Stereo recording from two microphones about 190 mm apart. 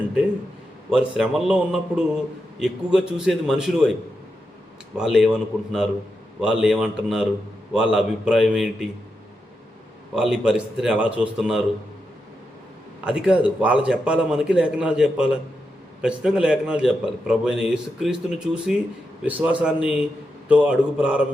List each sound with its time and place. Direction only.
0.9 s a man's voice: 5° right (ahead or behind)
4.9 s a man's voice: centre (ahead or behind)
10.2 s a man's voice: 5° right (ahead or behind)
13.1 s a man's voice: 5° right (ahead or behind)